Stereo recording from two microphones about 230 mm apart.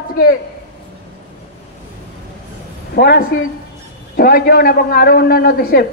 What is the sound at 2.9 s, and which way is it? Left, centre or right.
A man's voice, left.